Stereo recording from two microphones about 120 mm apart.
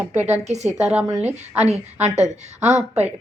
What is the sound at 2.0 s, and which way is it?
A woman's voice, 70° right (ahead or behind).